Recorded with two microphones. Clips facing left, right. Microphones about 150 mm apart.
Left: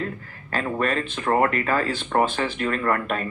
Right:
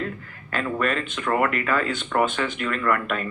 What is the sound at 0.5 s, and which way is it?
Speech, 35° left (ahead or behind).